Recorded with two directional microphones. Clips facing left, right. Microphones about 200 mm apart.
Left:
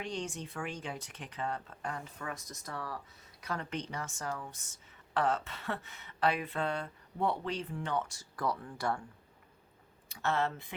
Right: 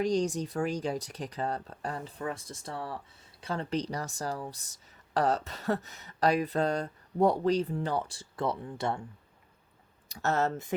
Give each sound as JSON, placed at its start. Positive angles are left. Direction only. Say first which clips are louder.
{"t": 0.0, "sound": "speech", "louder": "right 11 dB", "side_deg": -40}
{"t": 10.1, "sound": "speech", "louder": "right 4 dB", "side_deg": -40}